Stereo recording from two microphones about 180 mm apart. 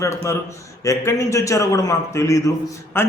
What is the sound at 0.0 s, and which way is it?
A man's voice, 15° left (ahead or behind).